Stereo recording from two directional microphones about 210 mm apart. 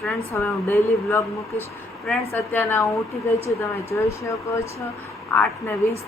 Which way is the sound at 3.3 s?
30° left (ahead or behind).